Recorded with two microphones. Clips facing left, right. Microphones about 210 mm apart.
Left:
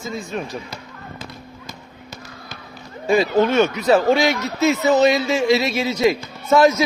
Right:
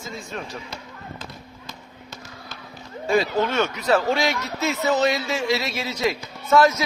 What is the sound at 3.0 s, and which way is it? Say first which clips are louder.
Speech: left 5 dB; 15° left (ahead or behind).